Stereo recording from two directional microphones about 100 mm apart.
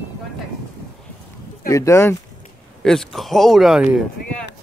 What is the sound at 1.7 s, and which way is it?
Speech, 30° left (ahead or behind).